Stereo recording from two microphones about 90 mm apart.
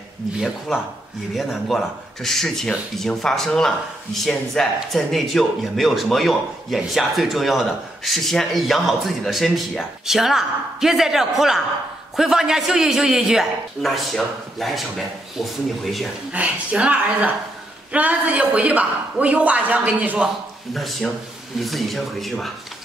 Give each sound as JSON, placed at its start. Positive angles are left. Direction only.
{"t": 0.7, "sound": "speech", "side_deg": 0}
{"t": 16.3, "sound": "a man's voice", "side_deg": -15}
{"t": 20.7, "sound": "speech", "side_deg": 0}